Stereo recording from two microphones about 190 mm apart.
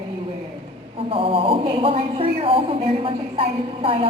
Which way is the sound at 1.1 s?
30° right (ahead or behind).